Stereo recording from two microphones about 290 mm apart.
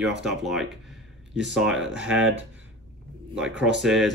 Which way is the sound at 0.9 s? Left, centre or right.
Centre.